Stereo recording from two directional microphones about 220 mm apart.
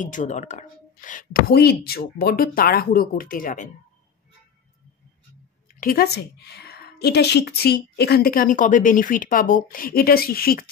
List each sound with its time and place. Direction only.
0.0 s speech: 35° left (ahead or behind)
5.8 s a woman's voice: 45° left (ahead or behind)